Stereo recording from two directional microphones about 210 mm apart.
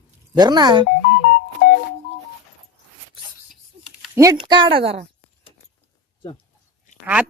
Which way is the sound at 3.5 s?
Centre (ahead or behind).